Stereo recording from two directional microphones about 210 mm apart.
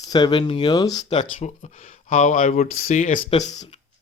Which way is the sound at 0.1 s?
20° left (ahead or behind).